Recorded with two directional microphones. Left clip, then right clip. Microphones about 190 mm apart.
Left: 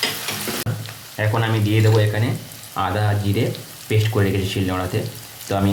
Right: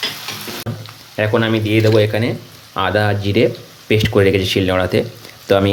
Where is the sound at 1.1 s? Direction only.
50° right (ahead or behind).